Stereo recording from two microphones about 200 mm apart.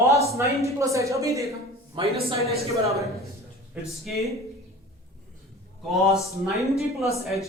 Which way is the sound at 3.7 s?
Centre (ahead or behind).